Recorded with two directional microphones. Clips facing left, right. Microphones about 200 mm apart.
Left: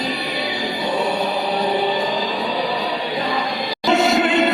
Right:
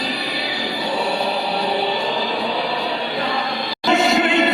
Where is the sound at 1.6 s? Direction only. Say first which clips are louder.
Left 3 dB; 15° left (ahead or behind).